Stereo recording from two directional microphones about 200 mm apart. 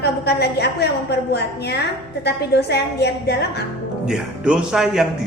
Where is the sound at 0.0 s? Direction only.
55° left (ahead or behind).